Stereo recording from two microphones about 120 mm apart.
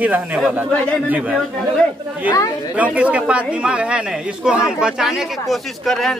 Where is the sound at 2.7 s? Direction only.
10° right (ahead or behind).